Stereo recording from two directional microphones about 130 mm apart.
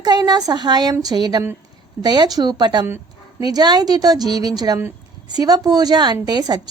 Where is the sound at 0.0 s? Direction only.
30° right (ahead or behind).